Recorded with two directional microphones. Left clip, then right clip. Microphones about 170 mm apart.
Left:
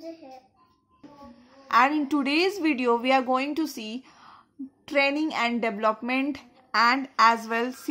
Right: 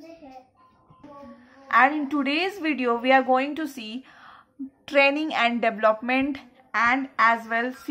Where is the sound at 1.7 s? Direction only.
35° left (ahead or behind).